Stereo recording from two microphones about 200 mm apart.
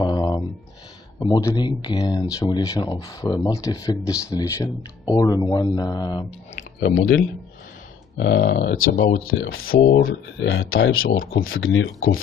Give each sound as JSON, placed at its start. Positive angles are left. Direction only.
{"t": 0.0, "sound": "a sound", "side_deg": 20}
{"t": 1.2, "sound": "speech", "side_deg": 15}
{"t": 6.8, "sound": "speech", "side_deg": 55}
{"t": 9.3, "sound": "speech", "side_deg": 90}
{"t": 9.8, "sound": "speech", "side_deg": 45}
{"t": 10.0, "sound": "speech", "side_deg": 70}